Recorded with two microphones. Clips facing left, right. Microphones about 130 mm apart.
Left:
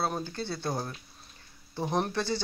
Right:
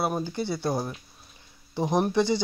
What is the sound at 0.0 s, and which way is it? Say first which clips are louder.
Speech: right 4 dB; 15° right (ahead or behind).